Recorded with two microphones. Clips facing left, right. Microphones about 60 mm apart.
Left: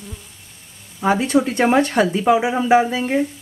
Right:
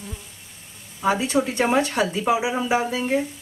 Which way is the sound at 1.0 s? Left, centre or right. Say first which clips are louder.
Left 4 dB; left.